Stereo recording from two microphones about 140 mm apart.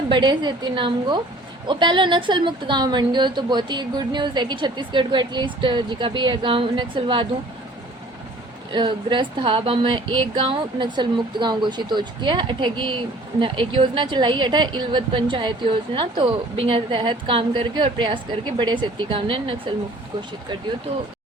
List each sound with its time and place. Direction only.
0.1 s a woman's voice: 30° right (ahead or behind)
8.7 s a woman's voice: 35° right (ahead or behind)